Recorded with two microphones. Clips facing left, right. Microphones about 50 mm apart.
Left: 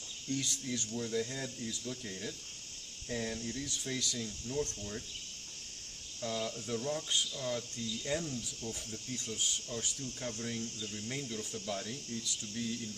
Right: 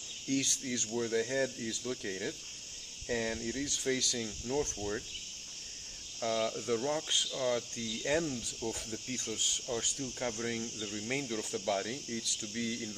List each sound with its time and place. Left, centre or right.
0.3 s speech: right
6.2 s speech: right
10.4 s speech: right